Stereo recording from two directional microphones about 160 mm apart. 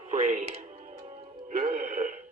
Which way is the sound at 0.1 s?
50° right (ahead or behind).